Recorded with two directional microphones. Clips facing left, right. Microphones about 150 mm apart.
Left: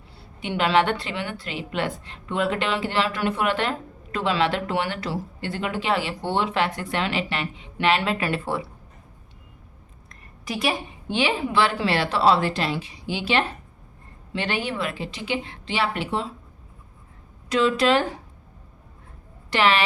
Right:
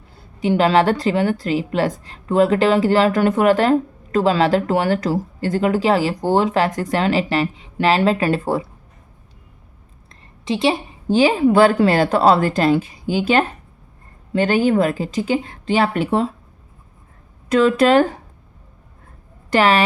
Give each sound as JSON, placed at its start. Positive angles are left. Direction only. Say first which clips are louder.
{"t": 0.3, "sound": "a woman's voice", "louder": "right 6 dB", "side_deg": -40}
{"t": 10.1, "sound": "a sound", "louder": "right 9 dB", "side_deg": -25}
{"t": 11.1, "sound": "a woman's voice", "louder": "right 9 dB", "side_deg": -40}
{"t": 17.5, "sound": "a woman's voice", "louder": "right 6 dB", "side_deg": -50}
{"t": 19.5, "sound": "a woman's voice", "louder": "right 6 dB", "side_deg": -45}